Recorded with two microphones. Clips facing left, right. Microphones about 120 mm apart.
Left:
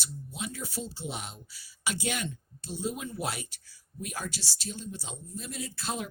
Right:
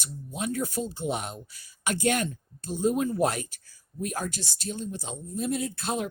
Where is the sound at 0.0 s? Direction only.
50° right (ahead or behind).